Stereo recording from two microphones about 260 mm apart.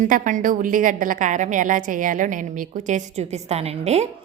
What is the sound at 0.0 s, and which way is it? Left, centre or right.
A woman's voice, right.